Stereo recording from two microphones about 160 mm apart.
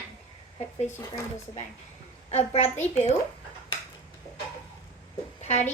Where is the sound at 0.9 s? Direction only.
15° left (ahead or behind).